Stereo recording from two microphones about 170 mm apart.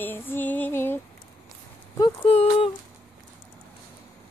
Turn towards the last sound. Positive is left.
turn(degrees=35)  # may be behind; listen again after turning